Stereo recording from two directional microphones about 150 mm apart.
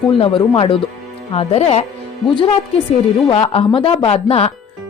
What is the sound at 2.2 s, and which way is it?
A woman's voice, 35° left (ahead or behind).